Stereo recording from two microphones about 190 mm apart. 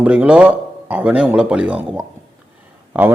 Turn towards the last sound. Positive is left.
turn(degrees=-10)  # may be behind; listen again after turning